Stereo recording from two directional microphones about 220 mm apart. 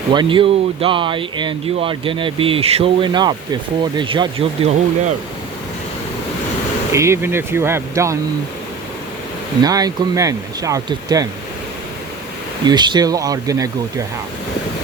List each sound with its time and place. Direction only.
0.1 s speech: 20° right (ahead or behind)
6.9 s speech: 10° right (ahead or behind)
9.6 s speech: 15° right (ahead or behind)
12.6 s speech: 20° right (ahead or behind)